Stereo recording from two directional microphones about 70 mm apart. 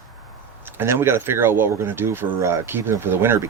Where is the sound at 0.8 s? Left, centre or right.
Right.